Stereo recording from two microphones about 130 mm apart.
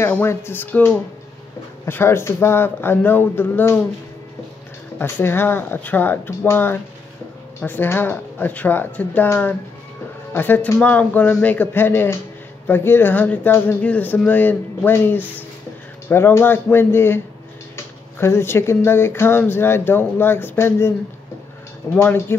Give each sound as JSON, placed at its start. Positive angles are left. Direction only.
{"t": 0.0, "sound": "speech", "side_deg": 20}
{"t": 4.9, "sound": "speech", "side_deg": 15}
{"t": 21.9, "sound": "speech", "side_deg": 20}